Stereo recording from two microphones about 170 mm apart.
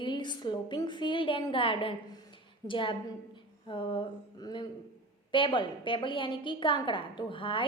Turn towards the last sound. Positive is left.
turn(degrees=30)  # may be behind; listen again after turning